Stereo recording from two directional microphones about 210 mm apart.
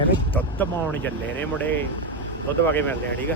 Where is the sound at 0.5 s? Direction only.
10° left (ahead or behind).